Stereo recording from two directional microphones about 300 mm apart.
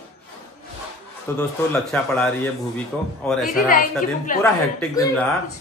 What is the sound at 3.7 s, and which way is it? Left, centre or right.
Speech, left.